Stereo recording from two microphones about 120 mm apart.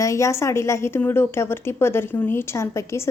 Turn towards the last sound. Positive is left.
turn(degrees=25)  # may be behind; listen again after turning